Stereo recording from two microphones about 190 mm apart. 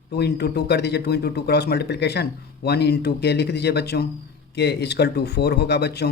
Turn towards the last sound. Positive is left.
turn(degrees=60)  # may be behind; listen again after turning